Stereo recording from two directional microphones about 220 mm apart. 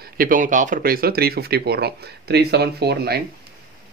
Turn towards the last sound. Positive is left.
turn(degrees=-45)  # may be behind; listen again after turning